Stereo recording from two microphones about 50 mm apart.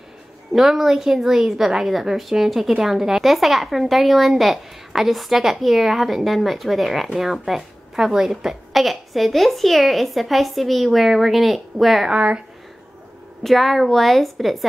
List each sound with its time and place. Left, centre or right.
0.5 s a woman's voice: centre
12.1 s speech: centre
13.4 s a woman's voice: centre